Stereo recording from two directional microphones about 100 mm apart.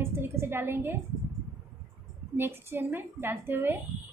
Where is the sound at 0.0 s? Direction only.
25° right (ahead or behind).